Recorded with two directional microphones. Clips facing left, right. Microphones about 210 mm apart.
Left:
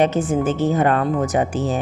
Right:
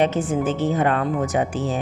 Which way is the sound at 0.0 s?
45° left (ahead or behind).